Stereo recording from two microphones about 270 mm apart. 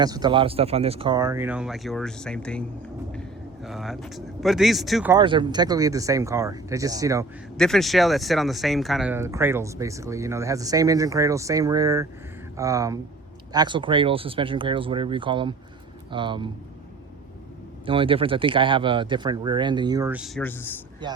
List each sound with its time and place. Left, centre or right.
0.0 s speech: centre
5.1 s speech: centre
7.5 s speech: centre
17.8 s speech: centre
21.0 s speech: centre